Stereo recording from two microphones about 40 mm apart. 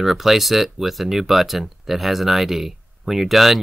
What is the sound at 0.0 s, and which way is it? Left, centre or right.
Speech, centre.